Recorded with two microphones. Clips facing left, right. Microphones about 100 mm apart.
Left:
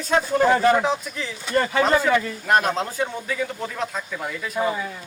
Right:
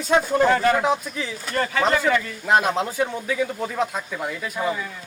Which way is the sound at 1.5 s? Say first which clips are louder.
Left 2 dB; 25° left (ahead or behind).